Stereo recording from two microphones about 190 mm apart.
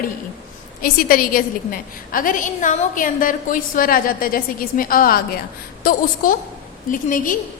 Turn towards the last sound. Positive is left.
turn(degrees=45)  # may be behind; listen again after turning